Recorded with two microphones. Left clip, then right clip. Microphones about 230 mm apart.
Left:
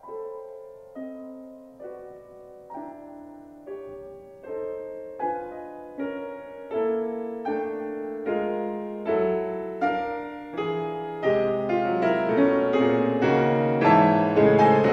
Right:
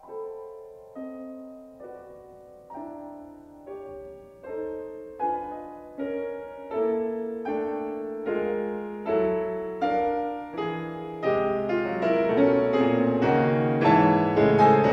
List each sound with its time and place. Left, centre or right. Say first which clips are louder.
4.5 s music: left 1 dB; left
6.1 s music: right 3 dB; left
6.7 s music: even; left